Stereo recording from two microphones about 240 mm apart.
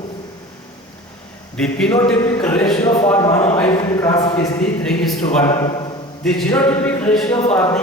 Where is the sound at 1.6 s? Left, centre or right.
Centre.